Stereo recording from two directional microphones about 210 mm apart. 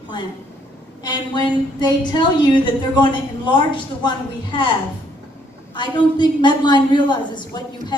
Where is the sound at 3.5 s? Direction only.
20° left (ahead or behind).